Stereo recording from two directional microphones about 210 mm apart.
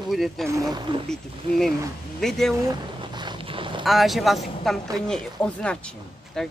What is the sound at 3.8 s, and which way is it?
Speech, centre (ahead or behind).